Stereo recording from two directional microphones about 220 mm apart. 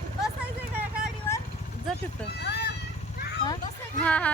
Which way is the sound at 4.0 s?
5° left (ahead or behind).